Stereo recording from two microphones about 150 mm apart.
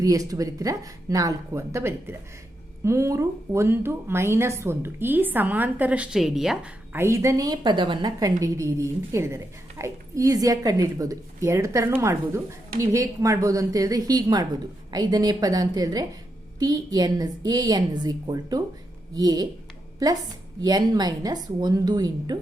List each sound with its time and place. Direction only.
0.0 s a woman's voice: 25° right (ahead or behind); by 6.7 s 5° right (ahead or behind)
6.9 s a woman's voice: 20° right (ahead or behind)